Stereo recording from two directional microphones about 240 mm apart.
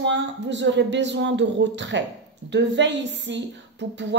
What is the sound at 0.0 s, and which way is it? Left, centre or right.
A woman's voice, right.